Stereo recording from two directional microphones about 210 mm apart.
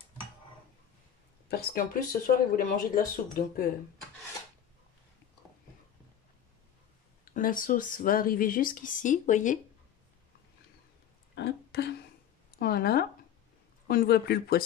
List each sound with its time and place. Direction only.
1.5 s speech: 45° left (ahead or behind)
7.3 s speech: 40° left (ahead or behind)
11.3 s a sound: 55° left (ahead or behind)
12.5 s speech: 45° left (ahead or behind)